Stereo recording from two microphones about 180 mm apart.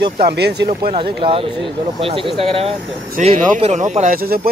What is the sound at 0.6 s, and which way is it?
Speech, 30° right (ahead or behind).